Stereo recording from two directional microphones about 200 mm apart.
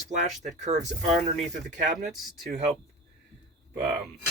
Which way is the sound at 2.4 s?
35° right (ahead or behind).